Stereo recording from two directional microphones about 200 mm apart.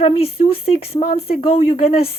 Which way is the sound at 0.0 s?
30° left (ahead or behind).